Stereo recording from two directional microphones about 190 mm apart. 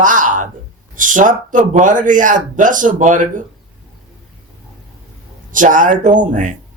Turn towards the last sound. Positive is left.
turn(degrees=-40)  # may be behind; listen again after turning